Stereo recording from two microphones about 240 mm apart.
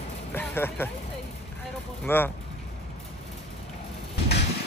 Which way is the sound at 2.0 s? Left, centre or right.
Centre.